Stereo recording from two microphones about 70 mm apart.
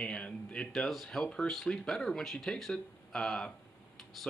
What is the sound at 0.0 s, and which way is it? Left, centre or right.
Speech, centre.